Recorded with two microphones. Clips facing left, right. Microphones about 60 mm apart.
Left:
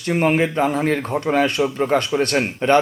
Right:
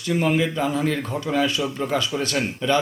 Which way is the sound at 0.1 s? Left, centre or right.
Left.